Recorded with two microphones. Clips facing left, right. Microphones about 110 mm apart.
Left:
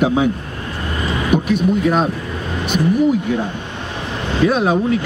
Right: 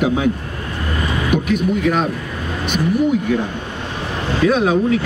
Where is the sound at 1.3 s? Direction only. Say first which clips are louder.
Left 2 dB; 30° left (ahead or behind).